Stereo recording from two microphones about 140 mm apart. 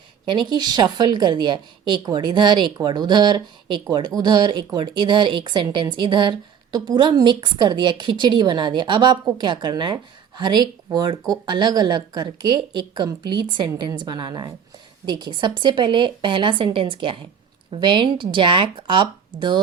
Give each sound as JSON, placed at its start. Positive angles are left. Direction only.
{"t": 0.3, "sound": "speech", "side_deg": -30}